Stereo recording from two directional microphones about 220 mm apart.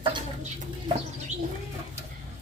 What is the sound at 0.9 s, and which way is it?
Bird, 20° right (ahead or behind).